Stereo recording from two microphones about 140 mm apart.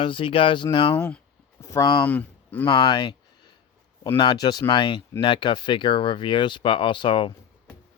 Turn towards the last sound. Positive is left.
turn(degrees=35)  # may be behind; listen again after turning